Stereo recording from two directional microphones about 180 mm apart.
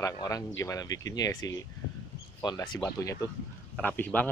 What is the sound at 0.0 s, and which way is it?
Speech, 20° left (ahead or behind).